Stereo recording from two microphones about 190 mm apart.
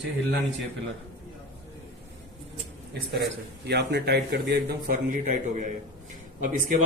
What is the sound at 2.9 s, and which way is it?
A man's voice, 60° right (ahead or behind).